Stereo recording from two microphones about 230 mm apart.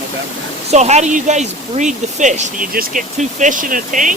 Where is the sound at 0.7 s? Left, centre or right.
Right.